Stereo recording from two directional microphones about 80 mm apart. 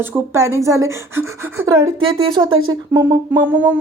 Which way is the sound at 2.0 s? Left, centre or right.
Right.